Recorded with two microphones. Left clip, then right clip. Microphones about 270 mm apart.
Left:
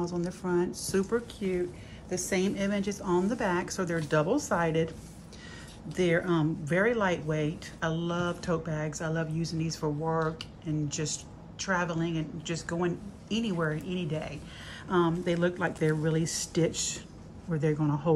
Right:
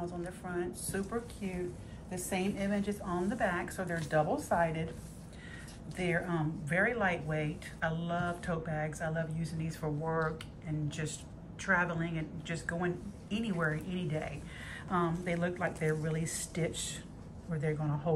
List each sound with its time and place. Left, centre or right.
0.0 s a woman's voice: left
2.0 s a woman's voice: left
5.9 s speech: centre
11.6 s speech: centre